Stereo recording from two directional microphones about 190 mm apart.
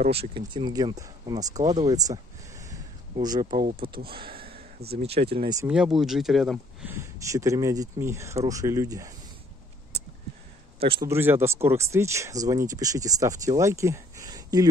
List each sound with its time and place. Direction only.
0.0 s speech: 30° right (ahead or behind)
1.6 s speech: 35° right (ahead or behind)
1.9 s a sound: 15° right (ahead or behind)
3.6 s speech: 50° right (ahead or behind)
4.1 s speech: 30° right (ahead or behind)
4.4 s a sound: 55° right (ahead or behind)
5.0 s speech: 30° right (ahead or behind)
5.7 s speech: 5° right (ahead or behind)
6.9 s speech: 15° right (ahead or behind)
11.1 s speech: 10° right (ahead or behind)